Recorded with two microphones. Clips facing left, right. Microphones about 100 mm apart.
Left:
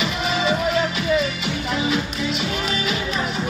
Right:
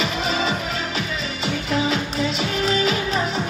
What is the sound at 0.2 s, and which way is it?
Music, 35° right (ahead or behind).